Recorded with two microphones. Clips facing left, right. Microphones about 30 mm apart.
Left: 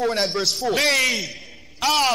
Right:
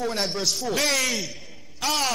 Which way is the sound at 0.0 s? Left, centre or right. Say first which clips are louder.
Left 4 dB; left.